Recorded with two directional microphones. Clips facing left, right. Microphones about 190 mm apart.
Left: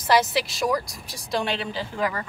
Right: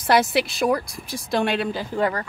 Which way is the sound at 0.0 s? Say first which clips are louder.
Right 2 dB; 55° right (ahead or behind).